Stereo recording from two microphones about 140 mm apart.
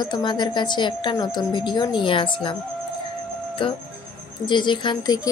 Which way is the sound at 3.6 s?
40° left (ahead or behind).